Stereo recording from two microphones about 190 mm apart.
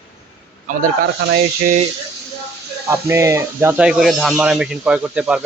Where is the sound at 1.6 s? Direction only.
40° right (ahead or behind).